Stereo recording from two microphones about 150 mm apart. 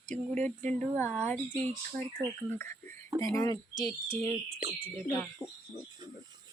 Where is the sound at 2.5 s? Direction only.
15° left (ahead or behind).